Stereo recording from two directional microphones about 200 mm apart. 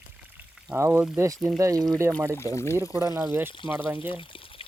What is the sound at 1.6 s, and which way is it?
Speech, 15° right (ahead or behind).